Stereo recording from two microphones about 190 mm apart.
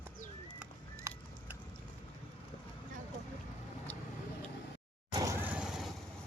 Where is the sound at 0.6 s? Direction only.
10° right (ahead or behind).